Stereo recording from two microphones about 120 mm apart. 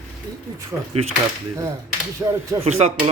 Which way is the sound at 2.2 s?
25° right (ahead or behind).